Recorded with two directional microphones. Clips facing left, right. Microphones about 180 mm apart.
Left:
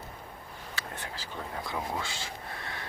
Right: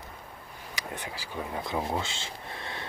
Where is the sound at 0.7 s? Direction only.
15° right (ahead or behind).